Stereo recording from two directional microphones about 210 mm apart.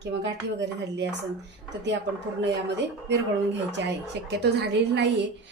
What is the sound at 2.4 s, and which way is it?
A woman's voice, 55° right (ahead or behind).